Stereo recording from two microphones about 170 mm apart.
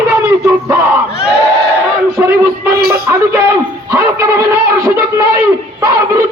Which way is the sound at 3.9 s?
15° right (ahead or behind).